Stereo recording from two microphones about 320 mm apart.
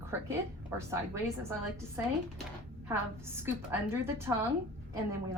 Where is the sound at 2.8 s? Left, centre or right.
Centre.